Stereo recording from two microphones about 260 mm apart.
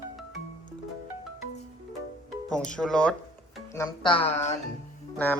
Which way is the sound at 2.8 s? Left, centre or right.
Centre.